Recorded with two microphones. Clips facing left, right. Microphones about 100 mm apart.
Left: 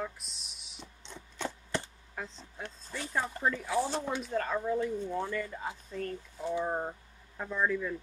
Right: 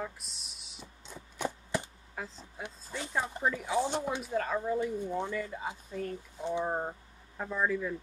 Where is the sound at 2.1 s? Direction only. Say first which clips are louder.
Even; 5° right (ahead or behind).